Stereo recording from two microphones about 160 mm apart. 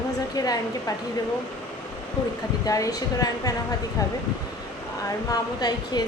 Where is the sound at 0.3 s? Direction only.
25° left (ahead or behind).